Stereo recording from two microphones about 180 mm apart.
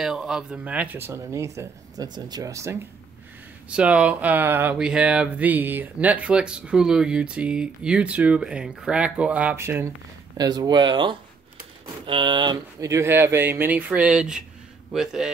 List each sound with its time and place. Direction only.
0.0 s speech: 5° right (ahead or behind)
10.3 s a man's voice: 20° right (ahead or behind); by 15.3 s 5° right (ahead or behind)